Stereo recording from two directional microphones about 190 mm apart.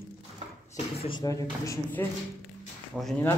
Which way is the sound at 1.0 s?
20° left (ahead or behind).